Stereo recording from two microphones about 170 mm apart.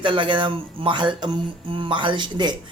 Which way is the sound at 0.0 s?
30° right (ahead or behind).